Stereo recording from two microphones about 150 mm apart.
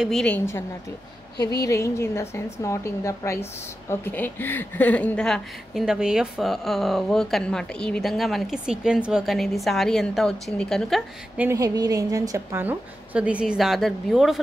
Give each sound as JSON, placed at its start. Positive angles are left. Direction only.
{"t": 0.0, "sound": "speech", "side_deg": 5}
{"t": 1.6, "sound": "a woman's voice", "side_deg": 20}
{"t": 11.3, "sound": "a woman's voice", "side_deg": -20}